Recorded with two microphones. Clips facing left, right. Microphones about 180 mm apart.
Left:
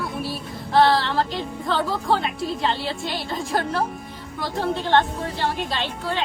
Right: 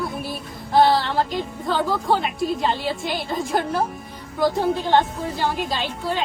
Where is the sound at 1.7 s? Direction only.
Centre (ahead or behind).